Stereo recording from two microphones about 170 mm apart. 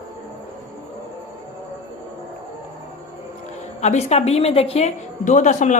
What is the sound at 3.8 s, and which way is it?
A woman's voice, 40° left (ahead or behind).